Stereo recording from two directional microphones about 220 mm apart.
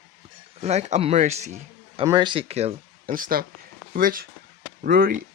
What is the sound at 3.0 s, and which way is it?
Speech, 40° right (ahead or behind).